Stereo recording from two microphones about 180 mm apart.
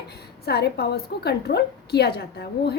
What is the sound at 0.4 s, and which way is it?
A woman's voice, 65° left (ahead or behind).